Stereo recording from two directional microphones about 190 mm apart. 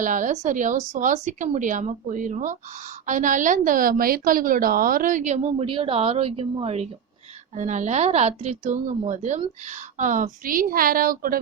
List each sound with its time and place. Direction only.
0.0 s a woman's voice: 45° right (ahead or behind)